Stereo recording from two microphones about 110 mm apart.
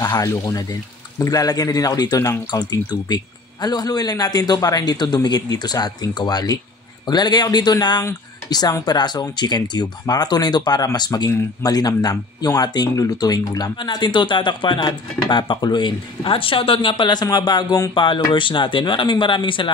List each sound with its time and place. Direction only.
0.0 s speech: 30° left (ahead or behind)
17.9 s speech: 50° left (ahead or behind)